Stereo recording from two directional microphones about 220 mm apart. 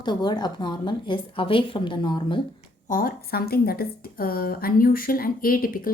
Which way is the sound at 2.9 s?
40° left (ahead or behind).